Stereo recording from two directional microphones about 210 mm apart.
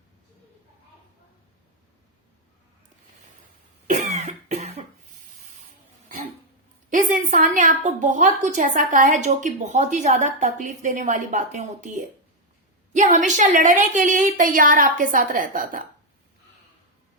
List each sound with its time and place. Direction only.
3.8 s cough: 35° right (ahead or behind)
6.9 s a woman's voice: 40° right (ahead or behind)